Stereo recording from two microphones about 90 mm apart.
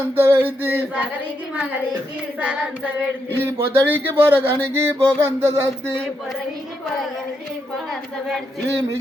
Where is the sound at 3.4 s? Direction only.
20° right (ahead or behind).